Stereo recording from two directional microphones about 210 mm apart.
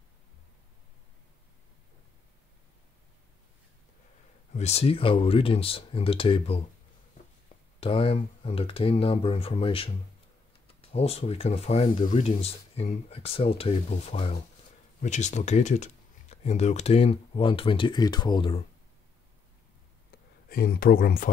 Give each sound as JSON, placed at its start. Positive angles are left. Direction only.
{"t": 4.6, "sound": "speech", "side_deg": 30}
{"t": 7.8, "sound": "speech", "side_deg": 25}
{"t": 20.4, "sound": "speech", "side_deg": 45}